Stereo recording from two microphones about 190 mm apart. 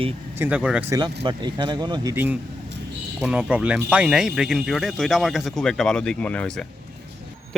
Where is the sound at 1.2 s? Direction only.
25° right (ahead or behind).